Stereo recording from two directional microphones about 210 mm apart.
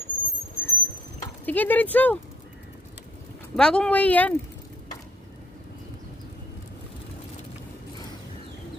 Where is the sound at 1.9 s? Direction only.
5° left (ahead or behind).